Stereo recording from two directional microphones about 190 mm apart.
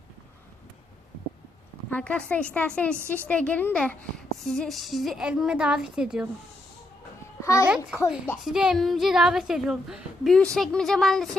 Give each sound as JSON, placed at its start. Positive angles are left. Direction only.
{"t": 1.9, "sound": "a woman's voice", "side_deg": 5}
{"t": 7.4, "sound": "a child's voice", "side_deg": 15}
{"t": 8.4, "sound": "a woman's voice", "side_deg": -5}